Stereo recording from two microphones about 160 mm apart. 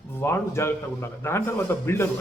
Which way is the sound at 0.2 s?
15° left (ahead or behind).